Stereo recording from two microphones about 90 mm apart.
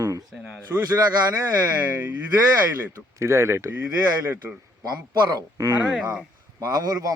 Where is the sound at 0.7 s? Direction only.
20° right (ahead or behind).